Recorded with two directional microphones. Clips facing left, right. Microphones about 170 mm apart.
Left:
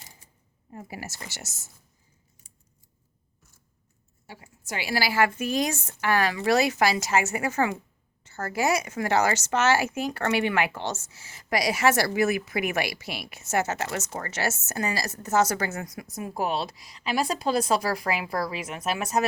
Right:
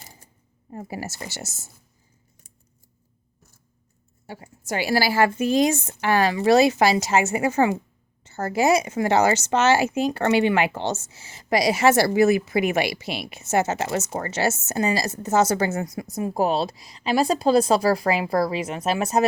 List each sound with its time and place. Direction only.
0.7 s speech: 35° right (ahead or behind)
4.3 s a woman's voice: 45° right (ahead or behind); by 19.2 s 30° right (ahead or behind)